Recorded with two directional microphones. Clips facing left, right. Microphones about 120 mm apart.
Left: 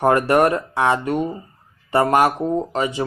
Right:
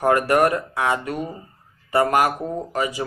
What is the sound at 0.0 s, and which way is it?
Speech, 30° left (ahead or behind).